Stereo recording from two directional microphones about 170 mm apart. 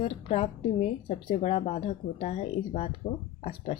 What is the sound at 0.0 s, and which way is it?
Speech, 35° left (ahead or behind).